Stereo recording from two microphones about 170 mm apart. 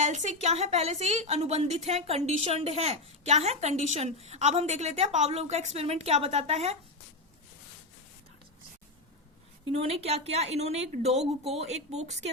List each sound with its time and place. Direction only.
0.0 s a woman's voice: 45° right (ahead or behind)
9.6 s a woman's voice: 35° right (ahead or behind)